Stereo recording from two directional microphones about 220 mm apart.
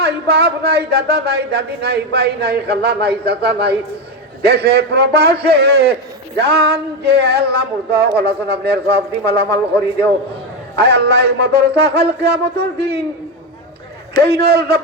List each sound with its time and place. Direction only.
0.0 s speech: 45° right (ahead or behind)
10.8 s speech: 50° right (ahead or behind)
14.2 s speech: 45° right (ahead or behind)